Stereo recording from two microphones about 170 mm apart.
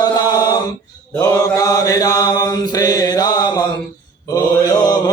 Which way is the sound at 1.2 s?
20° left (ahead or behind).